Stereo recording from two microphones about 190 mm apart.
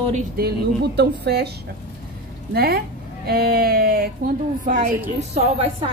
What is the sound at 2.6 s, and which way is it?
A woman's voice, 55° right (ahead or behind).